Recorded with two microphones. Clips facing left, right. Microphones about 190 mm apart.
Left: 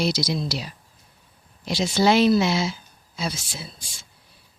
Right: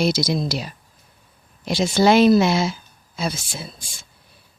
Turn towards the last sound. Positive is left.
turn(degrees=-50)  # may be behind; listen again after turning